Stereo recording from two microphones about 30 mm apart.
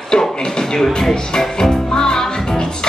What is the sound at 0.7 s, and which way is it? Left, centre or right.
Music, centre.